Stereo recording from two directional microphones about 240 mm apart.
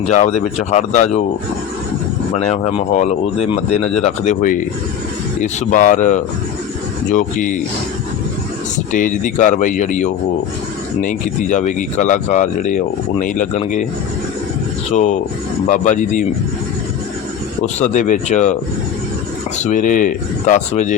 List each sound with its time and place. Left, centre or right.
0.0 s speech: left
2.3 s speech: left
8.9 s speech: left
14.9 s speech: left
17.7 s speech: left
19.5 s speech: left